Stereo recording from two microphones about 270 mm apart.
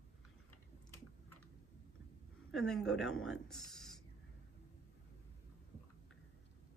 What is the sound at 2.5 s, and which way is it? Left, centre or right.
Speech, centre.